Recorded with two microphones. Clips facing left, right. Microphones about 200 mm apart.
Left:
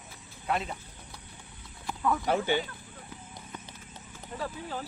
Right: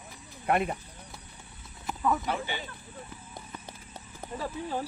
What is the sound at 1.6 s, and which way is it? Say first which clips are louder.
Horse: right 1 dB; 5° right (ahead or behind).